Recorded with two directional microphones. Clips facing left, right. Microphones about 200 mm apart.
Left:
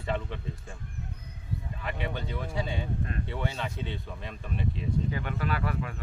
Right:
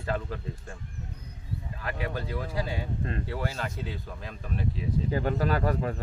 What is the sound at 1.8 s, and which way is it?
Speech, centre (ahead or behind).